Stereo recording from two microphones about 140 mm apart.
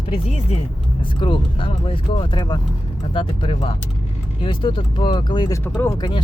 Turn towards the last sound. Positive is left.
turn(degrees=35)  # may be behind; listen again after turning